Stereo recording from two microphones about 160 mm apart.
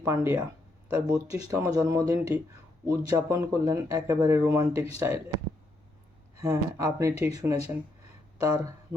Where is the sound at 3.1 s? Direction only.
20° right (ahead or behind).